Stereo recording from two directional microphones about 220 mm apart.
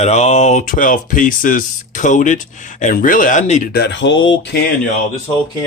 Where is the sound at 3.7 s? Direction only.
50° left (ahead or behind).